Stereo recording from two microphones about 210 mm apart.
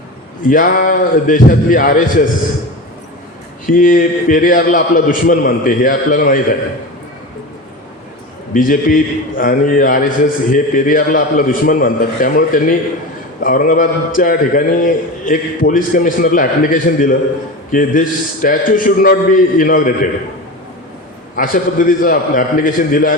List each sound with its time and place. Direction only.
0.4 s a man's voice: 40° left (ahead or behind)
3.7 s a man's voice: 40° left (ahead or behind)
8.5 s a man's voice: 40° left (ahead or behind)
21.3 s a man's voice: 40° left (ahead or behind)